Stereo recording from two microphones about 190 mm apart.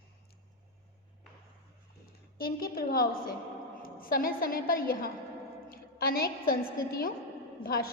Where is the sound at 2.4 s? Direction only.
50° left (ahead or behind).